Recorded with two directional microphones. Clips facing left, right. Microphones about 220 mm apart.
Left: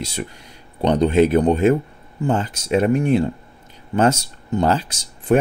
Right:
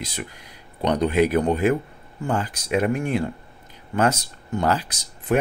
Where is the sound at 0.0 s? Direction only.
30° left (ahead or behind).